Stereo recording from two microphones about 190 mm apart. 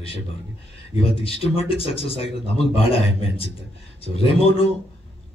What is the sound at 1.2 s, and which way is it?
A man's voice, 30° left (ahead or behind).